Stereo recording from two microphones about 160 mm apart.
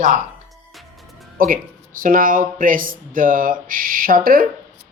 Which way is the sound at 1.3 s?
60° right (ahead or behind).